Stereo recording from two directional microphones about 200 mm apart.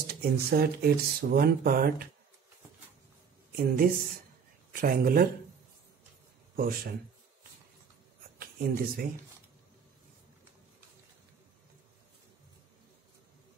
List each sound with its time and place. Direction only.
0.0 s speech: 50° right (ahead or behind)
3.5 s speech: 45° right (ahead or behind)
6.5 s speech: 45° right (ahead or behind)
8.4 s speech: 45° right (ahead or behind)